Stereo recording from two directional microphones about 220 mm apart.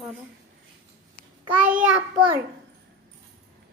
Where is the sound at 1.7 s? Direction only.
5° right (ahead or behind).